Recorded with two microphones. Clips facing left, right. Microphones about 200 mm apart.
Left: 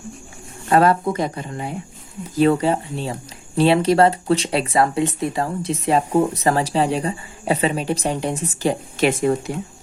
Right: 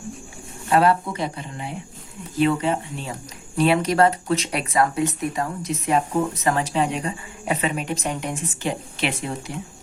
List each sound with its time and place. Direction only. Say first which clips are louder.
0.7 s a woman's voice: left 3 dB; 45° left (ahead or behind)